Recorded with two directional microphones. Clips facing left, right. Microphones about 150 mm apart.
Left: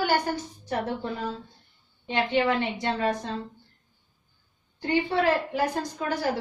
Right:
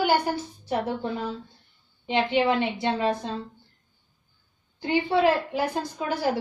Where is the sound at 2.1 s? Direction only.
15° right (ahead or behind).